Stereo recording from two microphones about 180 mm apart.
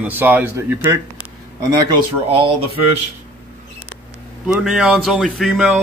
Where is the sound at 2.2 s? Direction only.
30° right (ahead or behind).